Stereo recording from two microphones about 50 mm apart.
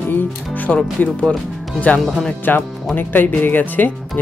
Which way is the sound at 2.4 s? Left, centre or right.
Left.